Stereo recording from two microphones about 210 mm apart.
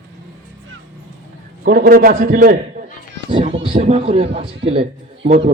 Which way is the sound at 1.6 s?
40° right (ahead or behind).